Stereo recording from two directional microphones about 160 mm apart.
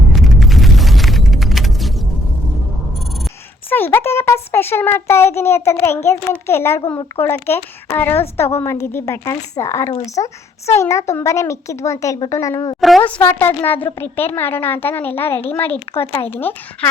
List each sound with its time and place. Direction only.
0.1 s a sound: centre (ahead or behind)
3.7 s a sound: 15° left (ahead or behind)
6.3 s a child's voice: 15° left (ahead or behind)
13.0 s a child's voice: 10° left (ahead or behind)
16.0 s speech: 35° left (ahead or behind)
16.3 s a child's voice: 10° left (ahead or behind)